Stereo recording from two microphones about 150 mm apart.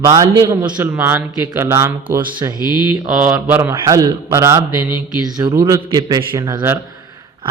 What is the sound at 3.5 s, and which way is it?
A man's voice, 20° right (ahead or behind).